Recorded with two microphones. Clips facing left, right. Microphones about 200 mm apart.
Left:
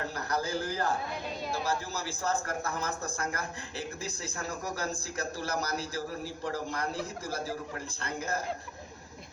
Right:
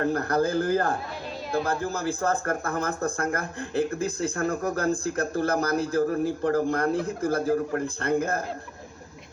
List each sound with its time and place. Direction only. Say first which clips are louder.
0.0 s speech: right 10 dB; 55° right (ahead or behind)